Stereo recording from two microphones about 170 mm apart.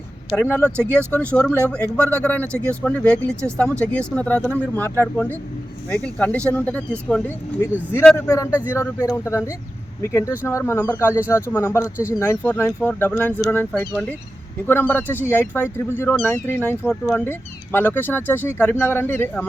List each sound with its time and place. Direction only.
0.5 s speech: 10° left (ahead or behind)
16.9 s speech: centre (ahead or behind)
17.2 s speech: 10° left (ahead or behind)